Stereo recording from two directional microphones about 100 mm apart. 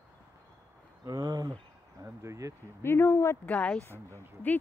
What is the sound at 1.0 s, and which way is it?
Speech, 35° right (ahead or behind).